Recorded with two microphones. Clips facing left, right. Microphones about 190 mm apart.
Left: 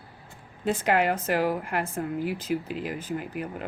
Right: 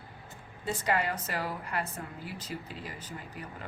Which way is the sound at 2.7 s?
70° left (ahead or behind).